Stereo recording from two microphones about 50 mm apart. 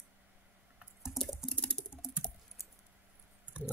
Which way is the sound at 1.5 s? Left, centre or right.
Centre.